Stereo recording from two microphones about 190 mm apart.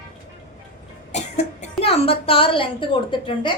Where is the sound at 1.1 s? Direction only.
35° left (ahead or behind).